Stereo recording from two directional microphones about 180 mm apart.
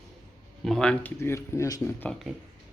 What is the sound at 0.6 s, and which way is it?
Speech, centre (ahead or behind).